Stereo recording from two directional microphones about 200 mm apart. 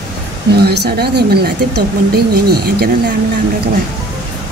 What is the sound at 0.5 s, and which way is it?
Speech, 55° right (ahead or behind).